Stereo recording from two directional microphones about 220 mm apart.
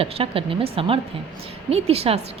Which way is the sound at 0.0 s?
25° right (ahead or behind).